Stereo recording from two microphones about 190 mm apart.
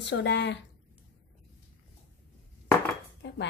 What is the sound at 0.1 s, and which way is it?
Speech, 65° left (ahead or behind).